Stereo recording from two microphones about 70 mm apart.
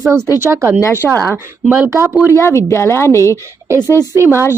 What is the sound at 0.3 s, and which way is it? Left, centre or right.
Speech, right.